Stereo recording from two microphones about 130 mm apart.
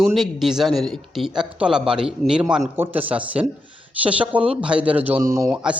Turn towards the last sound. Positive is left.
turn(degrees=-5)  # may be behind; listen again after turning